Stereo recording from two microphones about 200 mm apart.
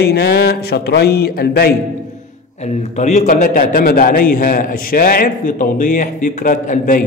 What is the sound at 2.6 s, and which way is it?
A man's voice, 35° left (ahead or behind).